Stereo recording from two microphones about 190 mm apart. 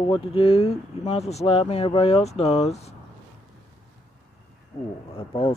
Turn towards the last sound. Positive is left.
turn(degrees=30)  # may be behind; listen again after turning